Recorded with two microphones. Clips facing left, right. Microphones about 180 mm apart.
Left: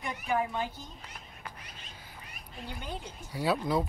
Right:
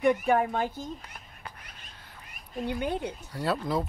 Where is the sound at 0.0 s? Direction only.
55° right (ahead or behind).